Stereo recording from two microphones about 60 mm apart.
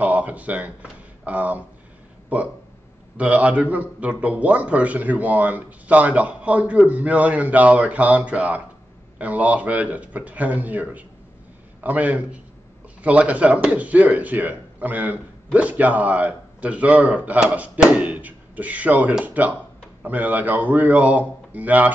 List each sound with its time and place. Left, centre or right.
0.0 s a man's voice: right